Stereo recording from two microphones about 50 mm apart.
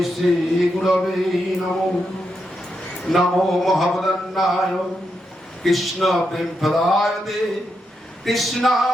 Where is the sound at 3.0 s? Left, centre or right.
Centre.